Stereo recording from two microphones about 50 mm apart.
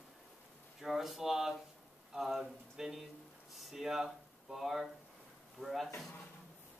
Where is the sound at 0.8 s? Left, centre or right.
Centre.